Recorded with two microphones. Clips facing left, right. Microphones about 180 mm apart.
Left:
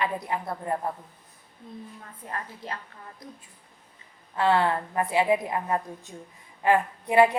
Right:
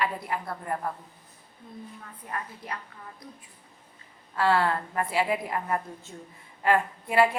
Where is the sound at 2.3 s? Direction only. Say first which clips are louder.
Even; 30° left (ahead or behind).